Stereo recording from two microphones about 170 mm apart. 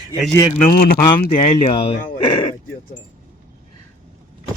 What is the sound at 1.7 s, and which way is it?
Speech, 30° left (ahead or behind).